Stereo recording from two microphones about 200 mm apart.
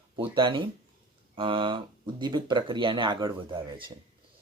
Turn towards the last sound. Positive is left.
turn(degrees=-25)  # may be behind; listen again after turning